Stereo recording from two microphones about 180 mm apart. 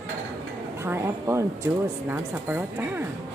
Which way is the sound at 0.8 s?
15° right (ahead or behind).